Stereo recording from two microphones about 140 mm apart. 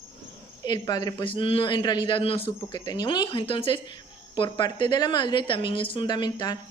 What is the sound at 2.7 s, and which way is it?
A woman's voice, 30° left (ahead or behind).